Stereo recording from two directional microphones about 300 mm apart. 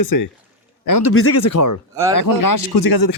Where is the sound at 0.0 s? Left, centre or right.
Left.